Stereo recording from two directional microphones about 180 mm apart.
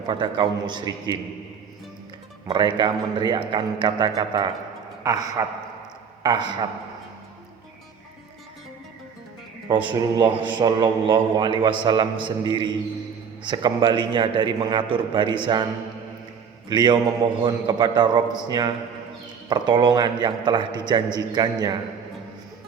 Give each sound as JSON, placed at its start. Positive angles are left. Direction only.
{"t": 0.1, "sound": "a man's voice", "side_deg": -25}
{"t": 2.5, "sound": "a man's voice", "side_deg": -25}
{"t": 9.6, "sound": "a man's voice", "side_deg": -25}
{"t": 16.6, "sound": "a man's voice", "side_deg": -25}